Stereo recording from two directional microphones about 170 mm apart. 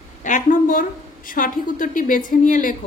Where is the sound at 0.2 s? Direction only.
50° left (ahead or behind).